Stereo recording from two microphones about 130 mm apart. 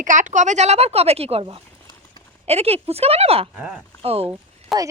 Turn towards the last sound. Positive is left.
turn(degrees=-25)  # may be behind; listen again after turning